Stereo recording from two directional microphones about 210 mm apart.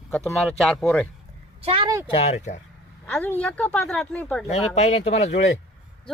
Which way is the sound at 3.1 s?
10° left (ahead or behind).